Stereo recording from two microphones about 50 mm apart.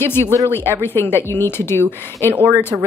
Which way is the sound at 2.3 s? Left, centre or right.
Right.